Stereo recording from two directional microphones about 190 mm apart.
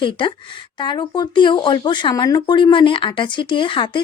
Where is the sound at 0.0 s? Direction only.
25° left (ahead or behind).